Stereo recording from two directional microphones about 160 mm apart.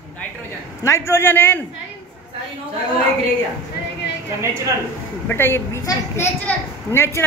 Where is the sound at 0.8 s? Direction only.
15° left (ahead or behind).